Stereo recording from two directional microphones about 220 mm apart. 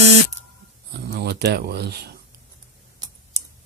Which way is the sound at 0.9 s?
50° right (ahead or behind).